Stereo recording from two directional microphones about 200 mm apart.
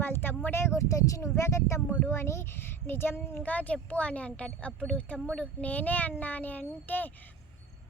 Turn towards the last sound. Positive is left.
turn(degrees=10)  # may be behind; listen again after turning